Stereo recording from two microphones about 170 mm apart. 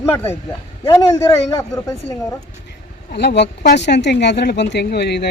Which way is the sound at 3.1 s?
85° left.